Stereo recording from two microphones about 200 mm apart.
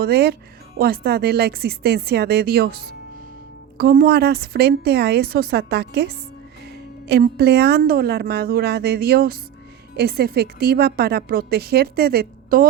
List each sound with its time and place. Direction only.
0.0 s a woman's voice: 55° right (ahead or behind)